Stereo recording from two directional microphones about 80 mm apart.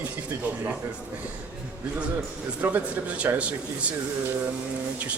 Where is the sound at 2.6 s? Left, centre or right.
Centre.